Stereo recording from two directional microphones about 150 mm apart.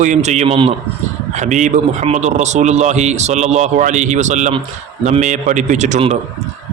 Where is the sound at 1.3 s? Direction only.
55° right (ahead or behind).